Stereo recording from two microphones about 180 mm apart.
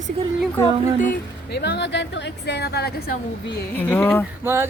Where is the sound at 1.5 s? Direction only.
70° left (ahead or behind).